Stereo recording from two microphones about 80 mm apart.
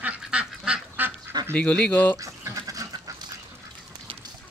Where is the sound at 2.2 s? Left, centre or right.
Right.